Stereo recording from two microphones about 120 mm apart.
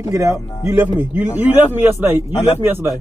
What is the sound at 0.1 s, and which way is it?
A man's voice, 25° right (ahead or behind).